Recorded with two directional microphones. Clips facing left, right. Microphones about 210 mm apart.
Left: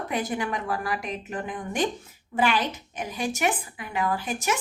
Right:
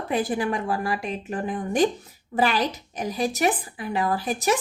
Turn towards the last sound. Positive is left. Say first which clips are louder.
# right 4 dB
turn(degrees=-35)  # may be behind; listen again after turning